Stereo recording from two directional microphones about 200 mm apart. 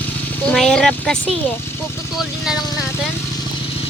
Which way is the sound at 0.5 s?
5° left (ahead or behind).